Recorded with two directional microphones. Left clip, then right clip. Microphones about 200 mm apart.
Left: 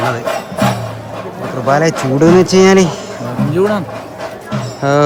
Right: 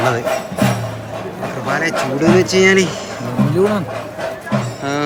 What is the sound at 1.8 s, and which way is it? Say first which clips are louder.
Speech: left 3 dB; 35° left (ahead or behind).